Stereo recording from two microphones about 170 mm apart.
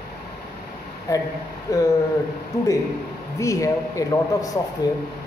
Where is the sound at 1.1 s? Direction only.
20° left (ahead or behind).